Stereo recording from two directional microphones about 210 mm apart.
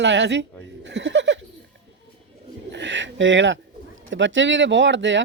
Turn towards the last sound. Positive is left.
turn(degrees=-60)  # may be behind; listen again after turning